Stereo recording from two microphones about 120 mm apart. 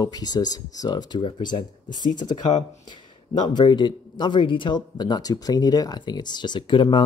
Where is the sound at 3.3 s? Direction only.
35° left (ahead or behind).